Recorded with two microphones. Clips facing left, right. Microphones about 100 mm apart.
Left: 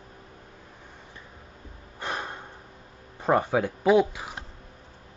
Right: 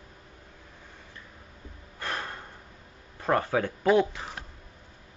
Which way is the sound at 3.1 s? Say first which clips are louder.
Left 3 dB; 15° left (ahead or behind).